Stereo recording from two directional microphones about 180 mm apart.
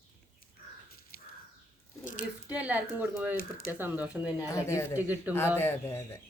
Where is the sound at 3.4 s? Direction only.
55° left (ahead or behind).